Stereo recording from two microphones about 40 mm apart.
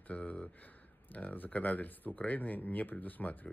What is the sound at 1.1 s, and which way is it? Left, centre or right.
Speech, left.